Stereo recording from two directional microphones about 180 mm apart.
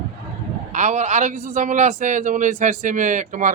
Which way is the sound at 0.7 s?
40° right (ahead or behind).